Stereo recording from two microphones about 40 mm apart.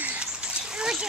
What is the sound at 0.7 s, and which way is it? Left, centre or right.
Splash, centre.